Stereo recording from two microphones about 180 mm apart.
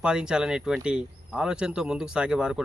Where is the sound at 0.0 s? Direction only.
5° right (ahead or behind).